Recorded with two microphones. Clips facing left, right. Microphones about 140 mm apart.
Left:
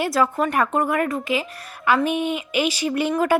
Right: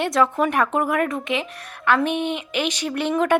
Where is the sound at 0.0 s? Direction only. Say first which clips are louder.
Right 1 dB; 5° left (ahead or behind).